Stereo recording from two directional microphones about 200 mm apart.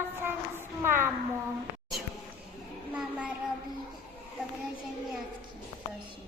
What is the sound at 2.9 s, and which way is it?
Child singing, 5° right (ahead or behind).